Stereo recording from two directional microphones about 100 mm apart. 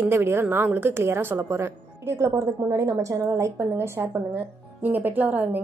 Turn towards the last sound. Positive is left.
turn(degrees=-15)  # may be behind; listen again after turning